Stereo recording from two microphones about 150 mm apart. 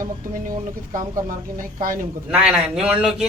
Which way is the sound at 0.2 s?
65° right (ahead or behind).